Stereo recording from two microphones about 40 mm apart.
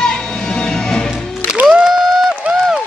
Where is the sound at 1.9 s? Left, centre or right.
Centre.